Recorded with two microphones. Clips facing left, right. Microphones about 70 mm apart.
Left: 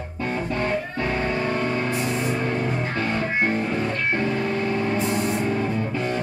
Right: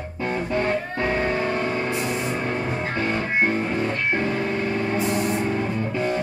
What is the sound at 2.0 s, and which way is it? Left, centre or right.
Music, centre.